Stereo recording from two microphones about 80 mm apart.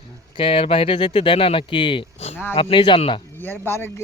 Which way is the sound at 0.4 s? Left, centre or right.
Left.